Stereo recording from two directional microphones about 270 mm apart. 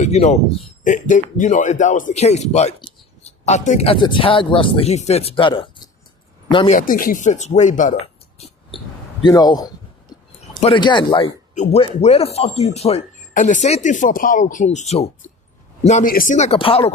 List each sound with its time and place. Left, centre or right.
0.0 s a man's voice: left
6.7 s speech: left
9.2 s a man's voice: centre